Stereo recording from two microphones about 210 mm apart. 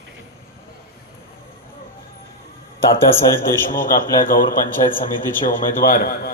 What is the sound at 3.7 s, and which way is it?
A man's voice, 40° left (ahead or behind).